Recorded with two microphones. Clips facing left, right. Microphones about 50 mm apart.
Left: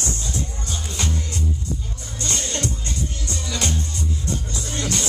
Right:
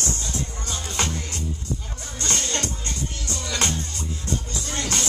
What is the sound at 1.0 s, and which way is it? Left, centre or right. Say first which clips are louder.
Music: right 2 dB; right.